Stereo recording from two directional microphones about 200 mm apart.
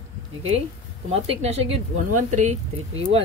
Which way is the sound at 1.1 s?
30° right (ahead or behind).